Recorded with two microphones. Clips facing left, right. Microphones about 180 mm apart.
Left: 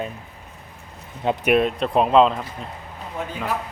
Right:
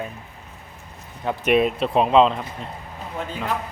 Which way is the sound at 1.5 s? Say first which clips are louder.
Right 1 dB; 5° right (ahead or behind).